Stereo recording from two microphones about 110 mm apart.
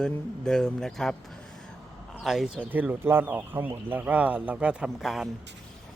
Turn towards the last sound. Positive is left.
turn(degrees=-5)  # may be behind; listen again after turning